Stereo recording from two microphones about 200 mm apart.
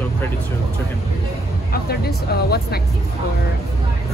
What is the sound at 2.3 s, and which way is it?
Speech, 55° left (ahead or behind).